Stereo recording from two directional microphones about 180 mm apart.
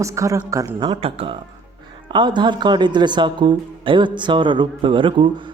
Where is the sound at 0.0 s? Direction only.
15° right (ahead or behind).